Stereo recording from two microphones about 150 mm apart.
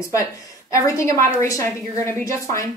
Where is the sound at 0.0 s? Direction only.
20° left (ahead or behind).